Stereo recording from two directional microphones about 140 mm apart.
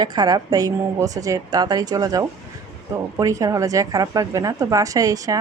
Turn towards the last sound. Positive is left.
turn(degrees=-25)  # may be behind; listen again after turning